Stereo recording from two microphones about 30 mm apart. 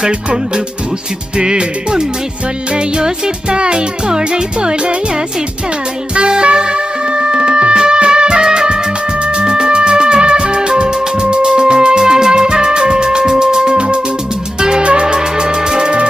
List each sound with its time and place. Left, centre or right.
1.4 s music: right
3.5 s music: right
6.1 s music: right